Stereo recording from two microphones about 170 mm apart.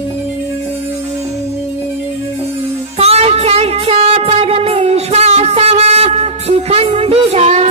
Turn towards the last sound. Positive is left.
turn(degrees=-40)  # may be behind; listen again after turning